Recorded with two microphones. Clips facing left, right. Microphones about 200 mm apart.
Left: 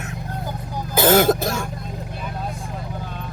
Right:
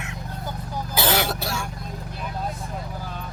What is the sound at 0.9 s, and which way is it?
Cough, 45° left (ahead or behind).